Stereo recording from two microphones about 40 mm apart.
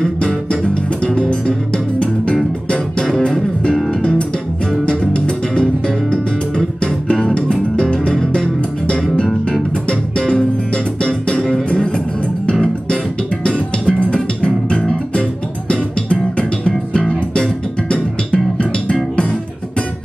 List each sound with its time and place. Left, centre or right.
4.8 s music: left
6.8 s music: centre
12.9 s music: left